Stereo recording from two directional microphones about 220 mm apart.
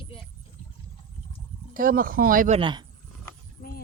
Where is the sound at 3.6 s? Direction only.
45° left (ahead or behind).